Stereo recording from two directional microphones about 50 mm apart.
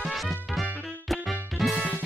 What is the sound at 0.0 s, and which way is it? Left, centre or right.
Music, centre.